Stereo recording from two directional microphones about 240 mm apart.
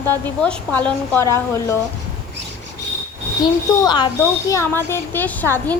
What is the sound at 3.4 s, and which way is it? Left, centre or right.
Speech, centre.